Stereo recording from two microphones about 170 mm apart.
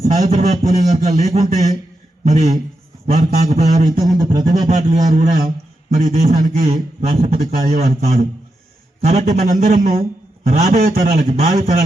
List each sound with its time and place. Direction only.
0.0 s a man's voice: 40° right (ahead or behind)
4.2 s a sound: 20° right (ahead or behind)
4.7 s a man's voice: 45° right (ahead or behind)
10.4 s a man's voice: 40° right (ahead or behind)